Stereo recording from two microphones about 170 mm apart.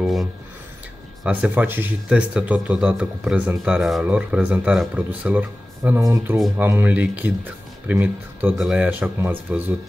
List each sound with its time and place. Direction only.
0.0 s speech: centre (ahead or behind)